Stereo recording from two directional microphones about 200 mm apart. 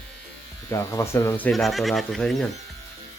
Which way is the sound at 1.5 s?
Centre (ahead or behind).